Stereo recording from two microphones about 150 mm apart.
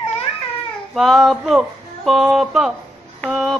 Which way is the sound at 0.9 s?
Centre (ahead or behind).